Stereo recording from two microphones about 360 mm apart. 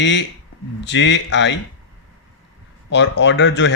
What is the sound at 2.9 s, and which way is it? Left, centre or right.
Speech, left.